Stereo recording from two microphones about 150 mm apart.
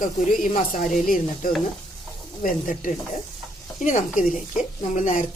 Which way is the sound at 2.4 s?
65° left (ahead or behind).